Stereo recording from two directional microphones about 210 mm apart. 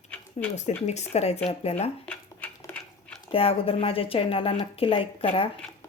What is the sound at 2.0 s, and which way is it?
Dog, 5° left (ahead or behind).